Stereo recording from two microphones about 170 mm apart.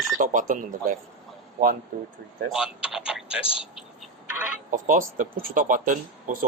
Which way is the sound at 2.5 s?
5° right (ahead or behind).